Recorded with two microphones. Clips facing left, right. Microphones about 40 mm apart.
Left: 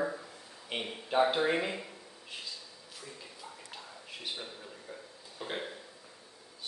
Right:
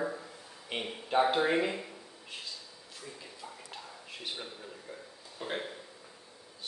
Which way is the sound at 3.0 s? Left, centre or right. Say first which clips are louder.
Right 2 dB; centre.